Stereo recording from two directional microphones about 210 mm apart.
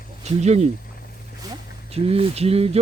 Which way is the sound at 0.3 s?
30° right (ahead or behind).